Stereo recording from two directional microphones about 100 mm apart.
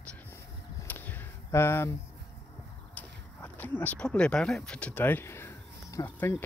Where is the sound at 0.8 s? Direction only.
20° left (ahead or behind).